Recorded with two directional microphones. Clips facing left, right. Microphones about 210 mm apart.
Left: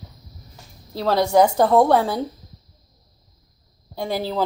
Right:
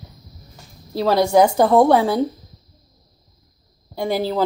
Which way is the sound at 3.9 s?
Centre (ahead or behind).